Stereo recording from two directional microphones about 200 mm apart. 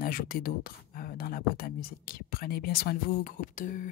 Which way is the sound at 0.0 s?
45° left (ahead or behind).